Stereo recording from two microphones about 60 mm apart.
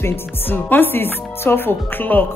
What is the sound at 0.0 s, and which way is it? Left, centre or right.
Music, left.